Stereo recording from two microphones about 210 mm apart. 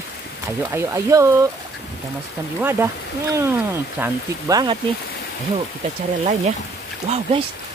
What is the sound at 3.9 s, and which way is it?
Speech, 10° right (ahead or behind).